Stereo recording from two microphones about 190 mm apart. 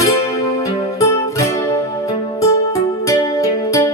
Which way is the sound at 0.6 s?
15° left (ahead or behind).